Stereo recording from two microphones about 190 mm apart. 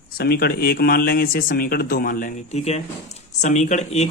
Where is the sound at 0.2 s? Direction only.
55° left (ahead or behind).